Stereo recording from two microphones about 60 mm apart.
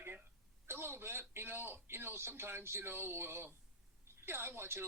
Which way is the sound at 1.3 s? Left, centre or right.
Right.